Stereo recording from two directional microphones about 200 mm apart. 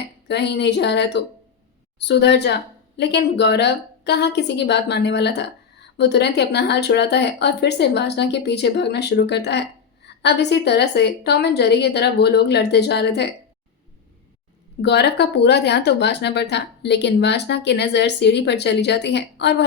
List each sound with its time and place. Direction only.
0.3 s speech: 55° left (ahead or behind)
14.8 s speech: 55° left (ahead or behind)